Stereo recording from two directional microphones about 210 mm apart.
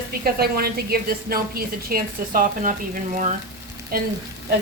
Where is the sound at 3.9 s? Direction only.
45° right (ahead or behind).